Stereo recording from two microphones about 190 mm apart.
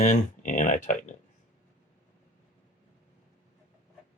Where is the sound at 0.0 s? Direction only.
40° left (ahead or behind).